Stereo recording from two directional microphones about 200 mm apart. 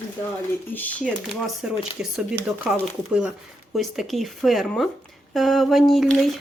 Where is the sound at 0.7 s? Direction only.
10° left (ahead or behind).